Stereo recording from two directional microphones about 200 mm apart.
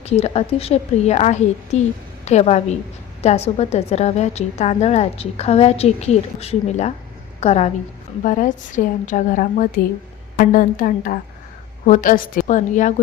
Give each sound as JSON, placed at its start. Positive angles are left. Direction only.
{"t": 0.0, "sound": "a woman's voice", "side_deg": 30}